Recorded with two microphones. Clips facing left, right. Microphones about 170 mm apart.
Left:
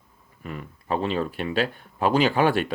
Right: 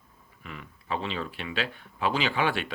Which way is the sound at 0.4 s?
45° left (ahead or behind).